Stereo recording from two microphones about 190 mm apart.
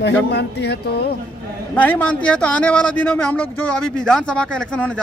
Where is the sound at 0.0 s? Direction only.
65° left (ahead or behind).